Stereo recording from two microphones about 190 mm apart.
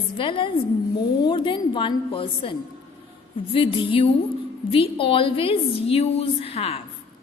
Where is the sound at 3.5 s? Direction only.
30° left (ahead or behind).